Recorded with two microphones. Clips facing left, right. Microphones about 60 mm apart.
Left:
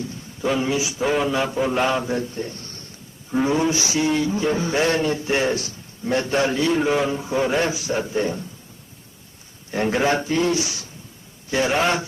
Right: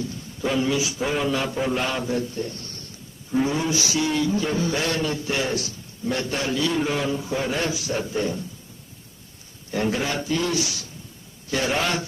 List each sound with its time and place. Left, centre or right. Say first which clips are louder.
0.0 s speech: left 2 dB; left
9.7 s a man's voice: left 4 dB; left